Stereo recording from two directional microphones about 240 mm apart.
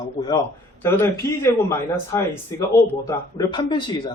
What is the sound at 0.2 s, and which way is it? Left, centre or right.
A man's voice, centre.